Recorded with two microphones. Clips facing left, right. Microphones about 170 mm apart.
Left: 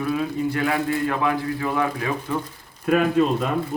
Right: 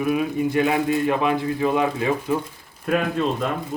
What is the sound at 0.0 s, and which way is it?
Speech, 15° right (ahead or behind).